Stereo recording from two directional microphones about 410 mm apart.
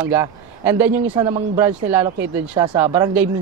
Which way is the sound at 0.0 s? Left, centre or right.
Centre.